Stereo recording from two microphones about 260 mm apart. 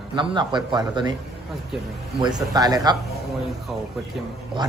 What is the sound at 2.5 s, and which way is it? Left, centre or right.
Speech, centre.